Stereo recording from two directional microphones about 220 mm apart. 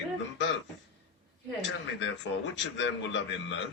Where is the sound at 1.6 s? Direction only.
55° left (ahead or behind).